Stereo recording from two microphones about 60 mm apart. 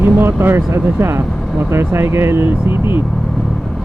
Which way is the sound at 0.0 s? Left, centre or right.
Right.